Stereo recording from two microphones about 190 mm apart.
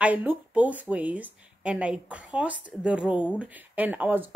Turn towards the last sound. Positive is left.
turn(degrees=-10)  # may be behind; listen again after turning